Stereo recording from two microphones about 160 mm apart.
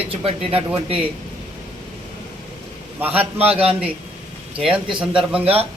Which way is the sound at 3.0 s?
10° right (ahead or behind).